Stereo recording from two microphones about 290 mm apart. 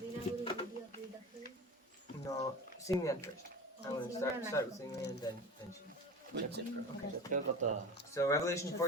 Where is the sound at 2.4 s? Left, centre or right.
Centre.